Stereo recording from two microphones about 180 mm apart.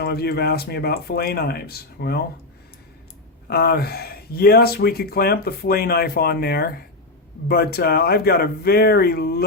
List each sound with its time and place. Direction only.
0.0 s speech: 60° left (ahead or behind)
3.5 s speech: 60° left (ahead or behind)